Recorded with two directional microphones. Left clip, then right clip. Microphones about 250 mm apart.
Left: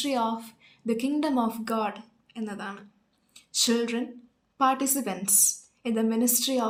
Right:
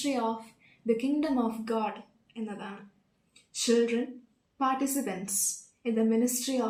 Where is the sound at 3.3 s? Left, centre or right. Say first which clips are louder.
Left 1 dB; left.